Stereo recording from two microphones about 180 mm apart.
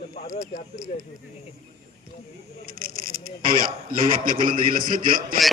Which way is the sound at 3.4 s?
50° right (ahead or behind).